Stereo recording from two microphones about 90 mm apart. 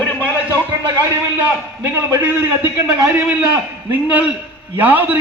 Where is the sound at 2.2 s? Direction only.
15° right (ahead or behind).